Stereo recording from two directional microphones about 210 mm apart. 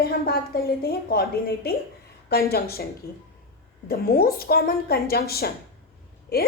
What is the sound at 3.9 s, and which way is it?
A woman's voice, 45° left (ahead or behind).